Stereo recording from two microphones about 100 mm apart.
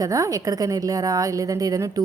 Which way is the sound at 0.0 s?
35° right (ahead or behind).